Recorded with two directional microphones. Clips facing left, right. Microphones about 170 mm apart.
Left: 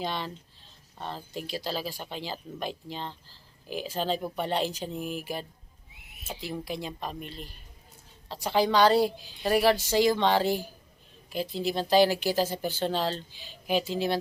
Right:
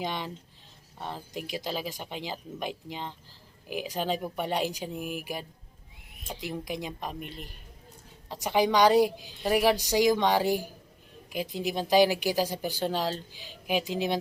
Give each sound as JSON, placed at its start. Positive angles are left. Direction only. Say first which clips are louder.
{"t": 0.0, "sound": "speech", "louder": "even", "side_deg": -15}